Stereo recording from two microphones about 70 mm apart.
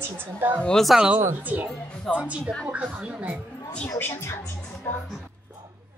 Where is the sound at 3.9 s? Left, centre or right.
Left.